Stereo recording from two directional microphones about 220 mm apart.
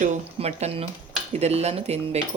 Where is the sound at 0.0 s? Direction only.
30° right (ahead or behind).